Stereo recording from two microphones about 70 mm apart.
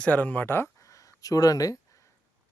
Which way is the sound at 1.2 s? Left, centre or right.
Left.